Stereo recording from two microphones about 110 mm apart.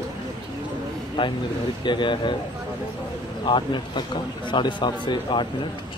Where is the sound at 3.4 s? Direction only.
45° left (ahead or behind).